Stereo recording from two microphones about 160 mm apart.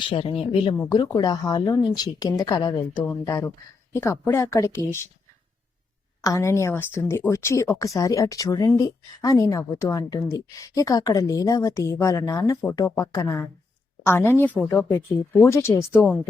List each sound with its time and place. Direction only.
0.0 s speech: 35° left (ahead or behind)
0.8 s speech: 25° left (ahead or behind)
6.2 s speech: 20° left (ahead or behind)